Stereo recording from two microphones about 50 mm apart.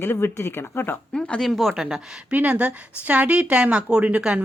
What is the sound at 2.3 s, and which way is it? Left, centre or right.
Speech, right.